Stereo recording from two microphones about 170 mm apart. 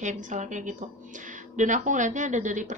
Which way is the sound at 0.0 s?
45° right (ahead or behind).